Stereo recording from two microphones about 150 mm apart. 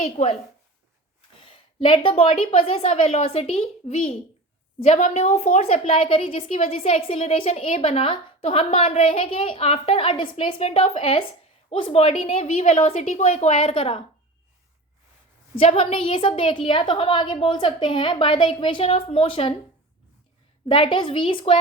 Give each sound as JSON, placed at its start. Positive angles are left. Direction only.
{"t": 0.0, "sound": "a woman's voice", "side_deg": 50}
{"t": 1.4, "sound": "a woman's voice", "side_deg": 35}
{"t": 15.5, "sound": "a woman's voice", "side_deg": 40}
{"t": 20.7, "sound": "a woman's voice", "side_deg": 35}